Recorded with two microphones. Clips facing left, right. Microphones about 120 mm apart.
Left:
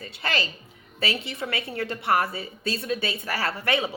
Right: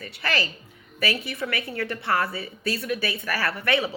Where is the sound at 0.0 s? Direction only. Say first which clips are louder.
Right 1 dB; 25° left (ahead or behind).